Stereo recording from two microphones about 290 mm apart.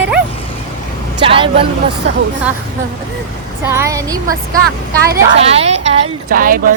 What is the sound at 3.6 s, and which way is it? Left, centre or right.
Speech, centre.